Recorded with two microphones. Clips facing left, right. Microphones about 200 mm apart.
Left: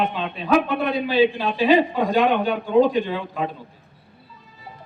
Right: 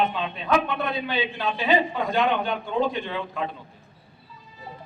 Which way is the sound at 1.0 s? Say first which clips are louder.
Left 8 dB; 35° left (ahead or behind).